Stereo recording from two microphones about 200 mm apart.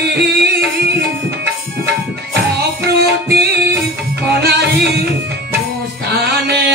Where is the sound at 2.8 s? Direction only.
55° right (ahead or behind).